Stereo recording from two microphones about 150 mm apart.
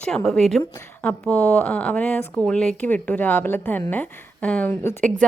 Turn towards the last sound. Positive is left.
turn(degrees=10)  # may be behind; listen again after turning